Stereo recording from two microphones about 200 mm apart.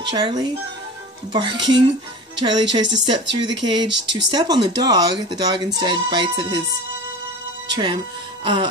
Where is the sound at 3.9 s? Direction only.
60° right (ahead or behind).